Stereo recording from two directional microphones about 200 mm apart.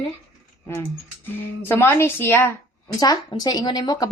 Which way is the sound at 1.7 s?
10° left (ahead or behind).